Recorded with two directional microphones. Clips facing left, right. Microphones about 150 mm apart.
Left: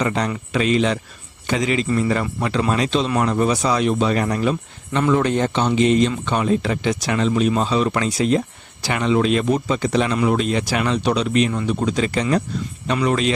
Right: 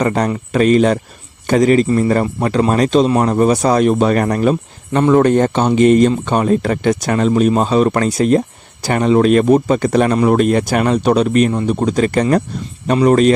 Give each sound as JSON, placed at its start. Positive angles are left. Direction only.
{"t": 0.0, "sound": "speech", "side_deg": -45}